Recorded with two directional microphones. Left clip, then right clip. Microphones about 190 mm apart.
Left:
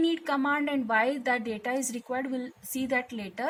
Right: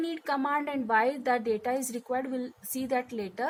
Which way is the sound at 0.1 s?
35° right (ahead or behind).